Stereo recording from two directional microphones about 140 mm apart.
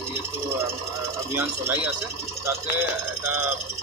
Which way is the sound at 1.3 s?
15° right (ahead or behind).